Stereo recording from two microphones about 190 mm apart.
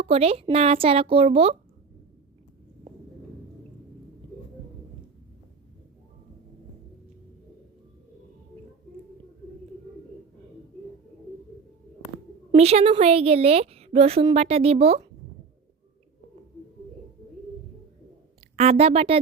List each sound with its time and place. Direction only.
0.0 s a woman's voice: 30° right (ahead or behind)
12.5 s a woman's voice: 35° right (ahead or behind)
18.5 s a woman's voice: 35° right (ahead or behind)